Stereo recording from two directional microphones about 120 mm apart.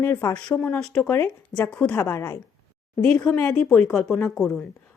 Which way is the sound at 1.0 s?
20° left (ahead or behind).